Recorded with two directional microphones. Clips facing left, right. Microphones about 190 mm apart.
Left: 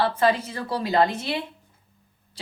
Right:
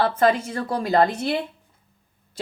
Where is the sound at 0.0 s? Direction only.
50° right (ahead or behind).